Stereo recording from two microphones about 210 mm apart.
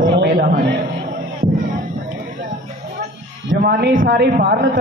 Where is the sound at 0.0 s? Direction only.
45° right (ahead or behind).